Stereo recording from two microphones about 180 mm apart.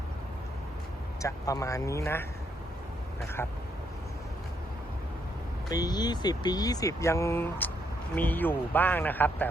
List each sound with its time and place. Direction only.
1.2 s speech: 20° left (ahead or behind)
5.6 s speech: 20° left (ahead or behind)